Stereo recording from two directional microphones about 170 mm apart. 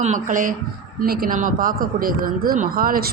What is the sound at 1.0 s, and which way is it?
Speech, 60° right (ahead or behind).